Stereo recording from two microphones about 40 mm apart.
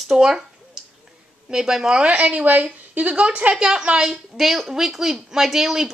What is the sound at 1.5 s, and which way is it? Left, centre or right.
Speech, centre.